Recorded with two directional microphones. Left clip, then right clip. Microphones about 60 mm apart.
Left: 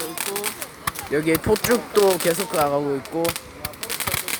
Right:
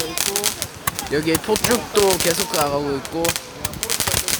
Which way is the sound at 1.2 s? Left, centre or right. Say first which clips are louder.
Even; left.